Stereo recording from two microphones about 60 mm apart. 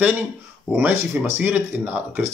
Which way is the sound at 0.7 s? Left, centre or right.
Right.